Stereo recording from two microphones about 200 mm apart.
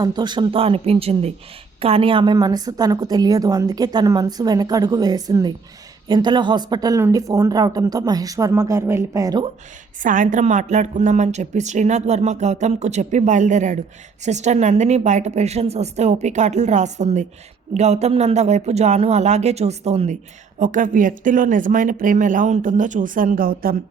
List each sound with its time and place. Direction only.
0.0 s a woman's voice: 20° right (ahead or behind)
10.0 s speech: 40° right (ahead or behind)